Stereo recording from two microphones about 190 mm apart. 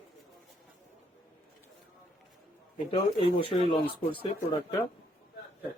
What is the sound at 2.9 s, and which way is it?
Speech, 30° left (ahead or behind).